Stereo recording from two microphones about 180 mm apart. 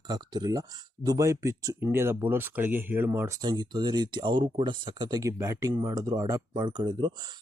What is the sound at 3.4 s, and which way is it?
Speech, 25° right (ahead or behind).